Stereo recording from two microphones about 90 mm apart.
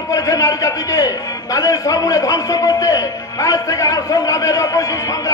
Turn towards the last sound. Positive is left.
turn(degrees=40)  # may be behind; listen again after turning